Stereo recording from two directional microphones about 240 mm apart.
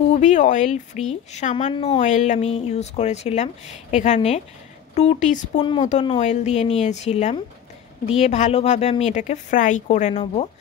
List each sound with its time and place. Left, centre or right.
0.1 s speech: left